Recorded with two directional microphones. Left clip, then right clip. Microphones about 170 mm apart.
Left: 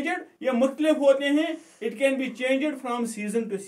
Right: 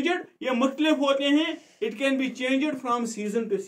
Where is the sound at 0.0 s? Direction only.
25° left (ahead or behind).